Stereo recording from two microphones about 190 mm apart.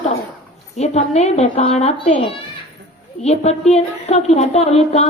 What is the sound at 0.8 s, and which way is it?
Speech, 35° left (ahead or behind).